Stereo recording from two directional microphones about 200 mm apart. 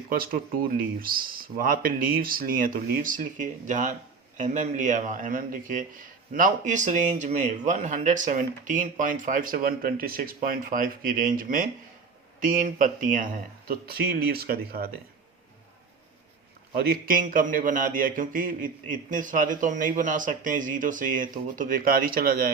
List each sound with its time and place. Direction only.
0.1 s speech: 45° right (ahead or behind)
16.7 s speech: 50° right (ahead or behind)